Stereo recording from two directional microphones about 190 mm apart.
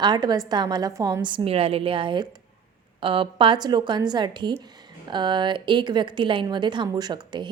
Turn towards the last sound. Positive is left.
turn(degrees=-20)  # may be behind; listen again after turning